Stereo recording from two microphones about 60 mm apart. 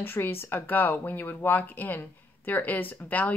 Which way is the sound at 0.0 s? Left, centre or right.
Left.